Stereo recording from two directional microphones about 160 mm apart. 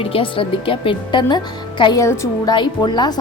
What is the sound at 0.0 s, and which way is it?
A woman's voice, 35° left (ahead or behind).